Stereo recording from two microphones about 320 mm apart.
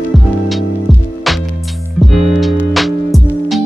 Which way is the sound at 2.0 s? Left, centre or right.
Centre.